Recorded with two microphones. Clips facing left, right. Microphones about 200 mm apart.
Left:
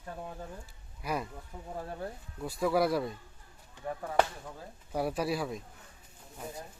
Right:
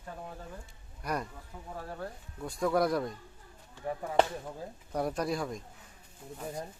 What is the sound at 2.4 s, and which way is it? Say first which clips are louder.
Speech: even; 5° left (ahead or behind).